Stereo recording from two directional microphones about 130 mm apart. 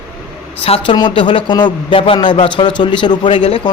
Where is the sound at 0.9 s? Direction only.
35° left (ahead or behind).